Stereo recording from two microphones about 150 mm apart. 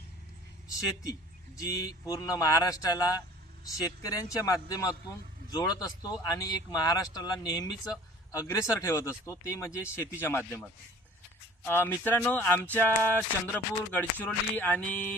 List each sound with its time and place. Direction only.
1.5 s speech: 25° left (ahead or behind)